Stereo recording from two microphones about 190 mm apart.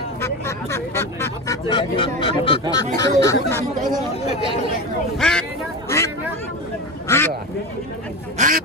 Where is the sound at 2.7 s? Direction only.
20° left (ahead or behind).